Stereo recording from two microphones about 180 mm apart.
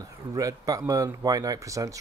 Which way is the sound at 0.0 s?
20° right (ahead or behind).